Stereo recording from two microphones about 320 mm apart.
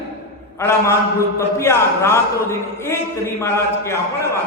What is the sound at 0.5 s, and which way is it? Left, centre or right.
A man's voice, centre.